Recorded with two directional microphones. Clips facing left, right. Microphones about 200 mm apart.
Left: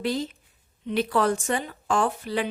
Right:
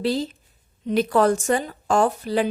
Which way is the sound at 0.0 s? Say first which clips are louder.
Right 4 dB; 35° right (ahead or behind).